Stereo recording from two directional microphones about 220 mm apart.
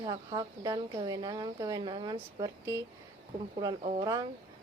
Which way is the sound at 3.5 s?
25° right (ahead or behind).